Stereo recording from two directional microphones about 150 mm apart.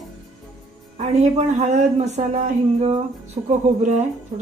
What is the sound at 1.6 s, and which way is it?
Speech, 50° right (ahead or behind).